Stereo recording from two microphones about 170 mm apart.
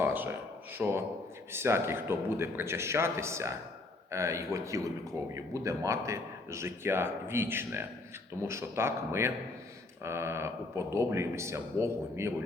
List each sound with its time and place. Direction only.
0.0 s a man's voice: 10° right (ahead or behind)